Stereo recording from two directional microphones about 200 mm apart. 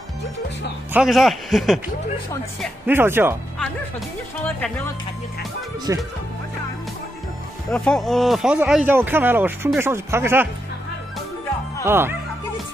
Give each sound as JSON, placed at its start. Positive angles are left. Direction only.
{"t": 0.9, "sound": "speech", "side_deg": 0}
{"t": 2.9, "sound": "speech", "side_deg": -10}
{"t": 4.6, "sound": "speech", "side_deg": 5}
{"t": 5.9, "sound": "speech", "side_deg": -15}
{"t": 7.7, "sound": "speech", "side_deg": 5}
{"t": 11.8, "sound": "speech", "side_deg": -10}